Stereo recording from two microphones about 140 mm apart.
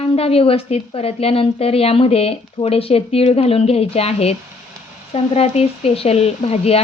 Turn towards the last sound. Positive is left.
turn(degrees=45)  # may be behind; listen again after turning